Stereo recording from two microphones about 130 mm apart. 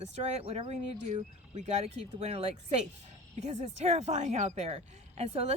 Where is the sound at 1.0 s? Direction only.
75° right (ahead or behind).